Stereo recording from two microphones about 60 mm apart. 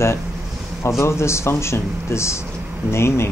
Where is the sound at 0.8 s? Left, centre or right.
Left.